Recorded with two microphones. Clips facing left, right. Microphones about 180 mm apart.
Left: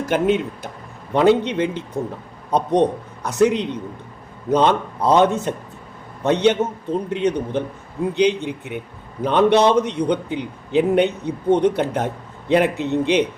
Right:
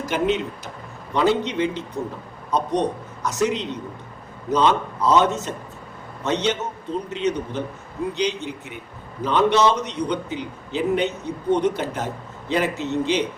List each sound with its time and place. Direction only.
0.0 s a man's voice: 55° left (ahead or behind)